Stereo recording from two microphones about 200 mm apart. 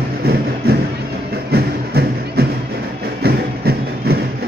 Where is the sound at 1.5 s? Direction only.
55° right (ahead or behind).